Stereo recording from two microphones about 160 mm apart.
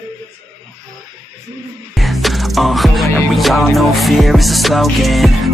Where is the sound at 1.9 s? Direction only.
Centre (ahead or behind).